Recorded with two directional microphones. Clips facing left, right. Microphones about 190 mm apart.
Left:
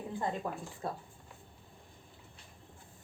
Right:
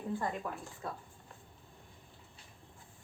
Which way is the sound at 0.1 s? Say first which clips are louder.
Even; 20° left (ahead or behind).